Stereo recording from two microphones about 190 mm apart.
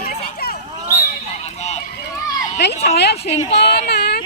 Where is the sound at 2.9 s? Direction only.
60° left (ahead or behind).